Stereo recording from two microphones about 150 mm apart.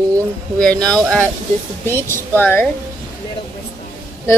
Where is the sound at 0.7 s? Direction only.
25° right (ahead or behind).